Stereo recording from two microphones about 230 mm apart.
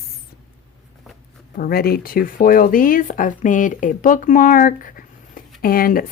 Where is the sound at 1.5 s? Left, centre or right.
Left.